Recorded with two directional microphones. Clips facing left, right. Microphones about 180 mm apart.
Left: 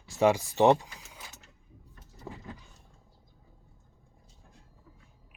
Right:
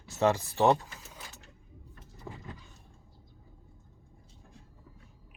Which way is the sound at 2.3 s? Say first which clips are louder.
Left 1 dB; 15° left (ahead or behind).